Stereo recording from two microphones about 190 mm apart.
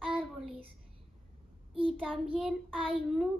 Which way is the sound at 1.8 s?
30° right (ahead or behind).